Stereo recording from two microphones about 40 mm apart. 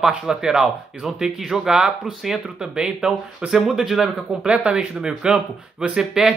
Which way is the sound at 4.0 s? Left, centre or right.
Right.